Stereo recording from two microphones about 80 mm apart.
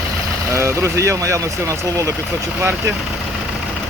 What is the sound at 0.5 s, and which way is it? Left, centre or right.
Speech, right.